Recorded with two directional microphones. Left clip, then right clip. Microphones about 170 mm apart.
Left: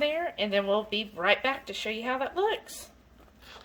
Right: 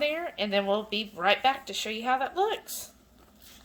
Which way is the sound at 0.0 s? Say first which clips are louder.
Left 1 dB; centre (ahead or behind).